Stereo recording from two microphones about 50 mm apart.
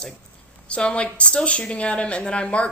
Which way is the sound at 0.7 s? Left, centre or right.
Left.